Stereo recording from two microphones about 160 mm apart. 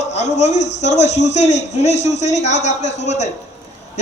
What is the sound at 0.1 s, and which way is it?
A man's voice, 45° left (ahead or behind).